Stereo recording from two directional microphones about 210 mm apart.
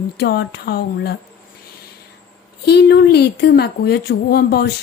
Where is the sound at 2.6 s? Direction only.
50° left (ahead or behind).